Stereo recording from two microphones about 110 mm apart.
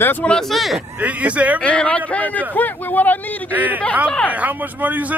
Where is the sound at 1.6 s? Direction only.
10° left (ahead or behind).